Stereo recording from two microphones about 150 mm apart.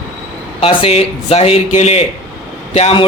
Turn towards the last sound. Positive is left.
turn(degrees=40)  # may be behind; listen again after turning